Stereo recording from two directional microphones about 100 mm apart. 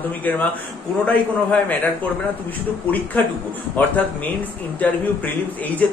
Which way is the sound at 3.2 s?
20° left (ahead or behind).